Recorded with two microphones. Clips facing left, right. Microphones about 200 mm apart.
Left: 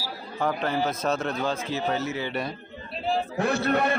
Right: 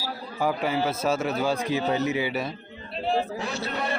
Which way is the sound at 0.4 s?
10° right (ahead or behind).